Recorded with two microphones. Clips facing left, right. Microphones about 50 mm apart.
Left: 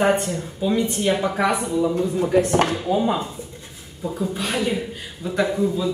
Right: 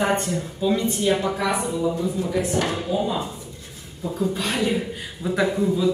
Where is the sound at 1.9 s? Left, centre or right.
Left.